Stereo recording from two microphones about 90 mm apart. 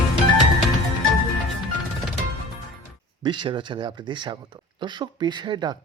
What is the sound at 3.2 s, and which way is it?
A man's voice, 60° right (ahead or behind).